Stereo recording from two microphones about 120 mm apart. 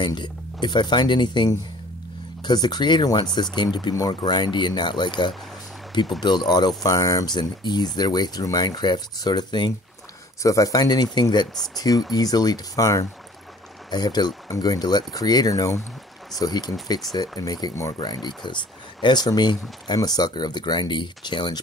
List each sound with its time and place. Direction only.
0.0 s speech: 40° left (ahead or behind)